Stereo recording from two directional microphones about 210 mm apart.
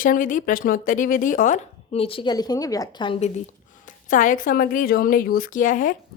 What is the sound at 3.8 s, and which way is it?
Speech, 40° left (ahead or behind).